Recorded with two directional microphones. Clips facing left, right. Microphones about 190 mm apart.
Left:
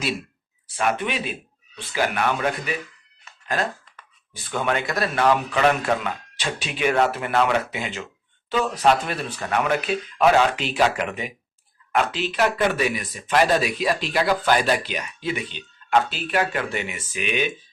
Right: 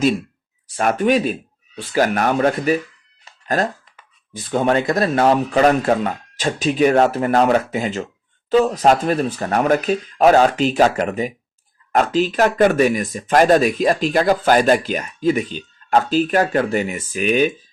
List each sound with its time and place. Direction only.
0.8 s speech: 40° right (ahead or behind)
3.2 s a sound: 40° right (ahead or behind)
4.4 s speech: 25° right (ahead or behind); by 17.5 s 40° right (ahead or behind)